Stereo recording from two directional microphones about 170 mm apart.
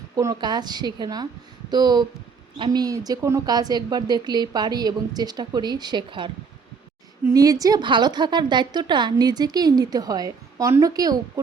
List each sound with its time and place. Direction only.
0.2 s a woman's voice: 20° right (ahead or behind)